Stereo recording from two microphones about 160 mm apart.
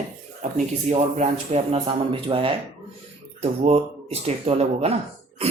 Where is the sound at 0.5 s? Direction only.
45° right (ahead or behind).